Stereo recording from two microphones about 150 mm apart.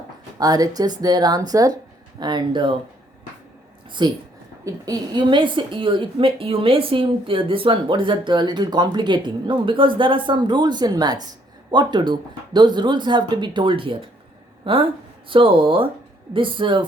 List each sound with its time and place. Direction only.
0.3 s speech: 25° right (ahead or behind)
4.0 s speech: 30° right (ahead or behind)